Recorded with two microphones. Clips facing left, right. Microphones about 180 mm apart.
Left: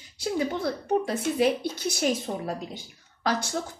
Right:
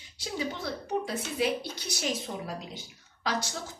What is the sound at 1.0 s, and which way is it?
A woman's voice, 55° left (ahead or behind).